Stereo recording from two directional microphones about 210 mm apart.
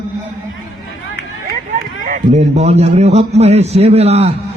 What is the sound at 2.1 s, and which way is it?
A man's voice, 35° right (ahead or behind).